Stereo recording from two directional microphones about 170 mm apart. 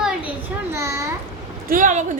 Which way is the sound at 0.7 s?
15° right (ahead or behind).